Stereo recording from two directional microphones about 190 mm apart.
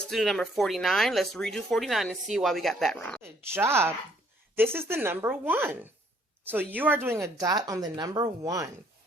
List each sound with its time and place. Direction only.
0.1 s speech: centre (ahead or behind)
3.2 s a woman's voice: 10° right (ahead or behind)